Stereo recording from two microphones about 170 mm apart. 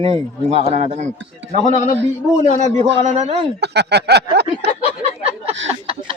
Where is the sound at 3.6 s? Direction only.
80° right.